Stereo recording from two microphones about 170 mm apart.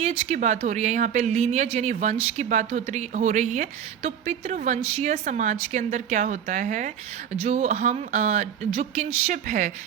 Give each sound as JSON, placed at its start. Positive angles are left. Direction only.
{"t": 0.0, "sound": "a woman's voice", "side_deg": -40}